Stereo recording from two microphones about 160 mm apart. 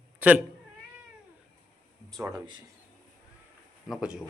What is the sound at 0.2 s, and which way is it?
Speech, 10° right (ahead or behind).